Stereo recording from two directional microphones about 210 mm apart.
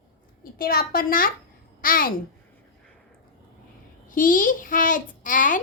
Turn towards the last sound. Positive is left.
turn(degrees=40)  # may be behind; listen again after turning